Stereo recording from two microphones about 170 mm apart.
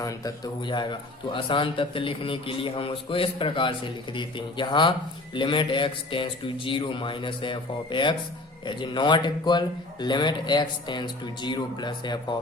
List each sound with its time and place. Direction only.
0.0 s a man's voice: 20° left (ahead or behind)